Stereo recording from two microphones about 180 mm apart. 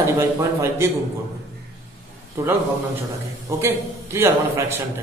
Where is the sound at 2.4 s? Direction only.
15° right (ahead or behind).